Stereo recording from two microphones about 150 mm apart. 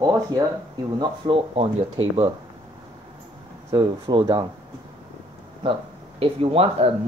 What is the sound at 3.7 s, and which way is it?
Speech, 25° right (ahead or behind).